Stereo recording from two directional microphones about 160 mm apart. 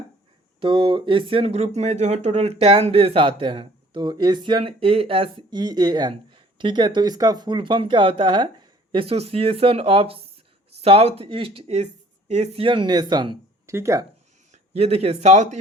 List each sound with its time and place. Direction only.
0.6 s speech: 30° right (ahead or behind)
13.7 s speech: 20° right (ahead or behind)
14.5 s speech: 40° right (ahead or behind)